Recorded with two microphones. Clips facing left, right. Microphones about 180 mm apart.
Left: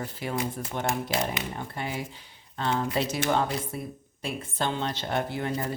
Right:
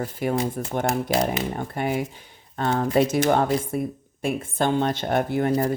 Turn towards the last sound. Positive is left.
turn(degrees=-45)  # may be behind; listen again after turning